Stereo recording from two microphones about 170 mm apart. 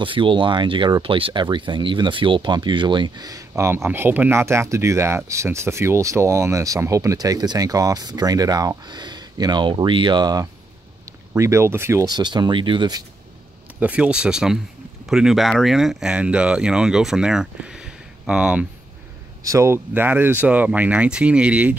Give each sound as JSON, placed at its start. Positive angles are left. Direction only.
{"t": 0.0, "sound": "speech", "side_deg": -30}
{"t": 13.7, "sound": "speech", "side_deg": -10}
{"t": 19.4, "sound": "speech", "side_deg": -15}